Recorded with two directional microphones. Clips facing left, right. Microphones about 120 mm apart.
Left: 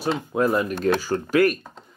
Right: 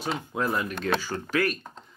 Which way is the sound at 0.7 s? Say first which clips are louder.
Left 6 dB; 40° left (ahead or behind).